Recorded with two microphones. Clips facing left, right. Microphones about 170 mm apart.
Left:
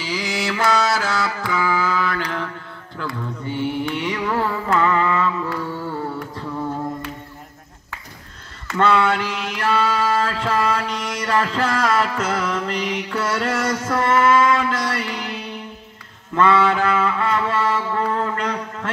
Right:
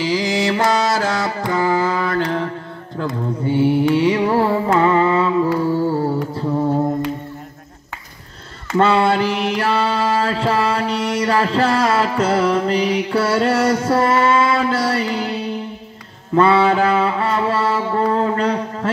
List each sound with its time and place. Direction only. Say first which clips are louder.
0.1 s music: right 3 dB; 40° right (ahead or behind)
0.7 s mantra: right 2 dB; 25° right (ahead or behind)
1.4 s music: right 7 dB; 45° right (ahead or behind)
2.0 s mantra: right 5 dB; 25° right (ahead or behind)
4.7 s music: right 3 dB; 30° right (ahead or behind)
6.3 s mantra: right 8 dB; 30° right (ahead or behind)
8.7 s mantra: right 3 dB; 30° right (ahead or behind)
9.8 s music: right 2 dB; 30° right (ahead or behind)
11.2 s mantra: right 3 dB; 30° right (ahead or behind)
13.1 s music: right 5 dB; 30° right (ahead or behind)
16.4 s mantra: right 1 dB; 30° right (ahead or behind)